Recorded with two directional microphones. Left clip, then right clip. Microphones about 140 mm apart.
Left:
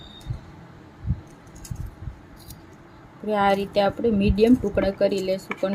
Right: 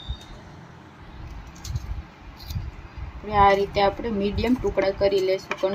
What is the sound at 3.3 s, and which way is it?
A woman's voice, 90° left.